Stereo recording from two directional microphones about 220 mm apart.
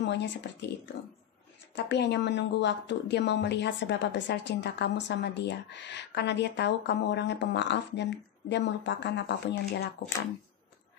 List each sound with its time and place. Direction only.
0.0 s speech: 50° left (ahead or behind)
1.8 s speech: 50° left (ahead or behind)